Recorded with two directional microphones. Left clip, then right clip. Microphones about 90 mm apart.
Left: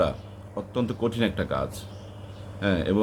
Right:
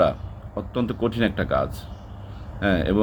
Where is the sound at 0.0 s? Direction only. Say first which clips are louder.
Right 5 dB; 15° left (ahead or behind).